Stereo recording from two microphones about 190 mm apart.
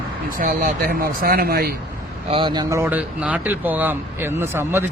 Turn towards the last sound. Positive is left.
turn(degrees=-10)  # may be behind; listen again after turning